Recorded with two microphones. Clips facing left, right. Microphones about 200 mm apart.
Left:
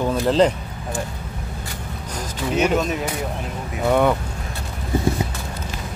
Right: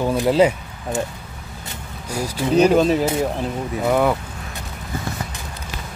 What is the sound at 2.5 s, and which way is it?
Speech, 35° right (ahead or behind).